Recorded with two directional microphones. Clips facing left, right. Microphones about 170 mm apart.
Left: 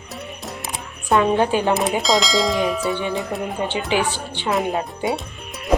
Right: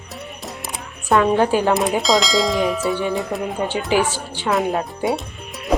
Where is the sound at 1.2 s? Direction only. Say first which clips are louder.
Right 2 dB; 20° left (ahead or behind).